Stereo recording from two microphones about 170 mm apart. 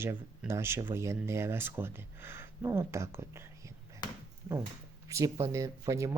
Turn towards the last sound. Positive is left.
turn(degrees=-20)  # may be behind; listen again after turning